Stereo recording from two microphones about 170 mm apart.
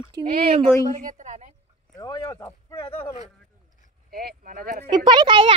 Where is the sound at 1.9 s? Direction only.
20° left (ahead or behind).